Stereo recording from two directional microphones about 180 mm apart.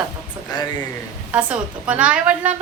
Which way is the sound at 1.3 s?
5° right (ahead or behind).